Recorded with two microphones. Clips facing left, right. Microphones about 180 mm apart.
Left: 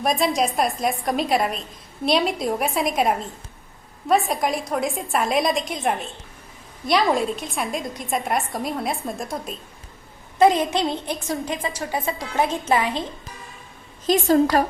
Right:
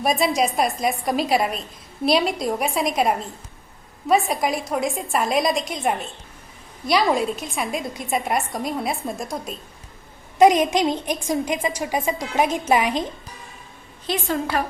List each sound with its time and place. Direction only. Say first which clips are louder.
0.0 s a woman's voice: right 1 dB; centre (ahead or behind)
10.3 s a woman's voice: right 2 dB; 15° right (ahead or behind)
14.1 s a woman's voice: left 7 dB; 40° left (ahead or behind)